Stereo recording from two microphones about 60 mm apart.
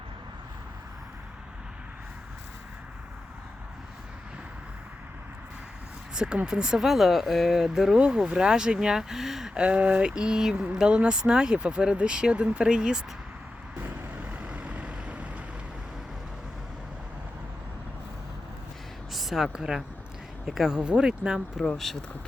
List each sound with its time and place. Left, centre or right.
6.1 s speech: centre
9.6 s speech: right
14.2 s vehicle: right
19.1 s speech: centre
21.8 s speech: centre